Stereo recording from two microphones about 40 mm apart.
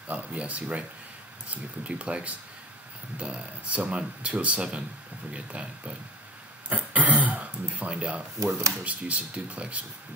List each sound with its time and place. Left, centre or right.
0.1 s speech: right
6.7 s music: right
8.0 s speech: right